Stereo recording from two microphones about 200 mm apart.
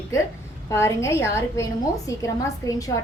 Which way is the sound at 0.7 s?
15° left (ahead or behind).